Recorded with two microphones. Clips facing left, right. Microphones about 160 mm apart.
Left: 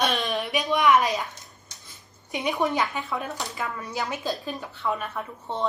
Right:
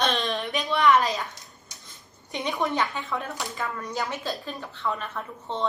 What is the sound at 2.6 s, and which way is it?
A woman's voice, 15° left (ahead or behind).